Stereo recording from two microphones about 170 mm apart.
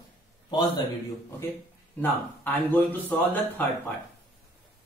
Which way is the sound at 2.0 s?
10° left (ahead or behind).